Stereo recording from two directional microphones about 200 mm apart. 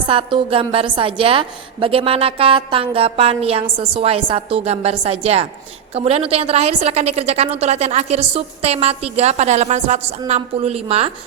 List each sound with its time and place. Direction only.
0.0 s a woman's voice: 25° right (ahead or behind)